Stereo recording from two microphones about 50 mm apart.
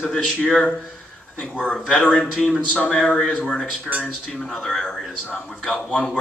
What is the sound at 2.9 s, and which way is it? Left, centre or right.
Speech, left.